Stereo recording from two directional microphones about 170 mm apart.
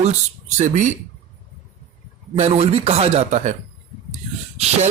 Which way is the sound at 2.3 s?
35° right (ahead or behind).